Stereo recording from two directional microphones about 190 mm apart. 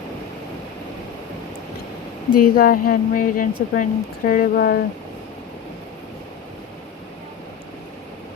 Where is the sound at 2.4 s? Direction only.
50° left (ahead or behind).